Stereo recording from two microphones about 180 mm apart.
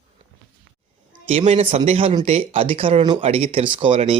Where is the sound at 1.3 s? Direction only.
35° right (ahead or behind).